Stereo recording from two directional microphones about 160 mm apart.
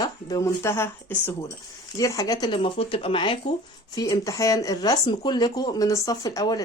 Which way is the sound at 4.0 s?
20° left (ahead or behind).